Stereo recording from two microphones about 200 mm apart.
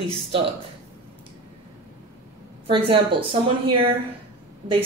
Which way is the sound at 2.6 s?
25° right (ahead or behind).